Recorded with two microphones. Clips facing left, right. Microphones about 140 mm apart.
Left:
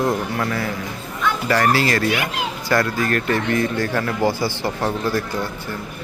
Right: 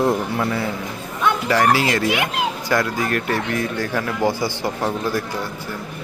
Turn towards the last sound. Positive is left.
turn(degrees=-15)  # may be behind; listen again after turning